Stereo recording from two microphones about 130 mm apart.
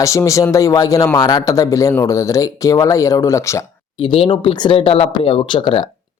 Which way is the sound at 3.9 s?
45° left (ahead or behind).